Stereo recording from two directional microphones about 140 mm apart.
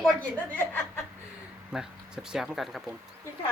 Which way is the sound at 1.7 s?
5° right (ahead or behind).